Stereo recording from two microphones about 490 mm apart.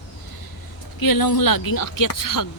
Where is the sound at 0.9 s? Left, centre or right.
Left.